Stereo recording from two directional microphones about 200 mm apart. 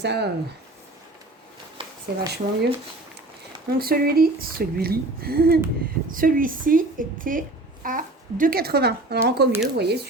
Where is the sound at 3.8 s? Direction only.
50° right (ahead or behind).